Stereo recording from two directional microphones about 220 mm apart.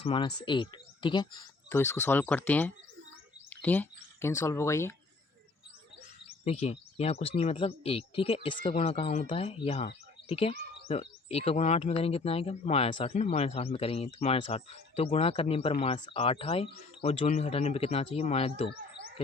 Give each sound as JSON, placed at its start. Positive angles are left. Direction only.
{"t": 0.0, "sound": "speech", "side_deg": 25}
{"t": 6.2, "sound": "speech", "side_deg": 30}